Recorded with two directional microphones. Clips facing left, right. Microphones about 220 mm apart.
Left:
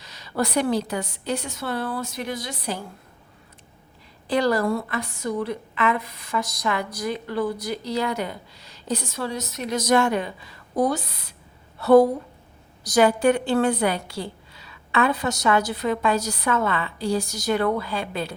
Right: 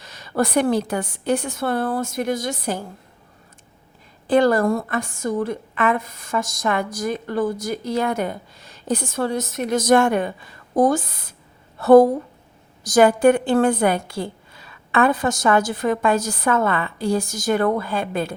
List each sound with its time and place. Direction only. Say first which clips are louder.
0.0 s a woman's voice: right 4 dB; 50° right (ahead or behind)
4.3 s a woman's voice: right 5 dB; 50° right (ahead or behind)